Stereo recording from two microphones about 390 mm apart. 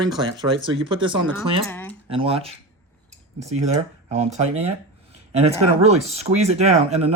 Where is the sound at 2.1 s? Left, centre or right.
Centre.